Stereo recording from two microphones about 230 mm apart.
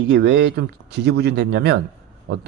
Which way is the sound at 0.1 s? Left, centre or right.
Right.